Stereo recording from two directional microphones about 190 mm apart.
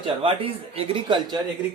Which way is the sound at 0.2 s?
30° right (ahead or behind).